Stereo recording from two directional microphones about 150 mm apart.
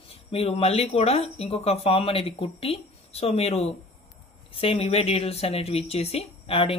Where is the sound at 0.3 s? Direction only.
40° left (ahead or behind).